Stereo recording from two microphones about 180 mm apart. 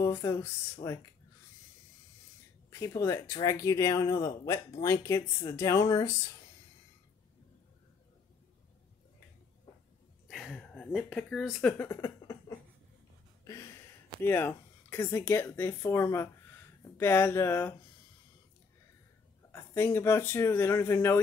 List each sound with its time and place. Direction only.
0.0 s speech: 15° left (ahead or behind)
2.7 s speech: 15° left (ahead or behind)
10.2 s speech: centre (ahead or behind)
12.0 s cough: 20° left (ahead or behind)
13.4 s speech: 15° left (ahead or behind)
19.5 s speech: 15° left (ahead or behind)